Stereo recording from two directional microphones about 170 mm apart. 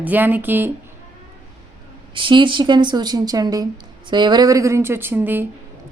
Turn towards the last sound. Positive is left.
turn(degrees=-10)  # may be behind; listen again after turning